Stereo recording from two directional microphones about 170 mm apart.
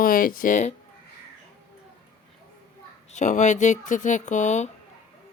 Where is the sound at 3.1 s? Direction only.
45° left (ahead or behind).